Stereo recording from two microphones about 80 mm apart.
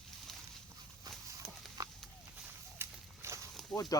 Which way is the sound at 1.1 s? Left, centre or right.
Right.